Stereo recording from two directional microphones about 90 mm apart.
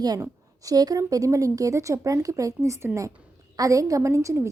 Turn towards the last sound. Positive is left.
turn(degrees=-35)  # may be behind; listen again after turning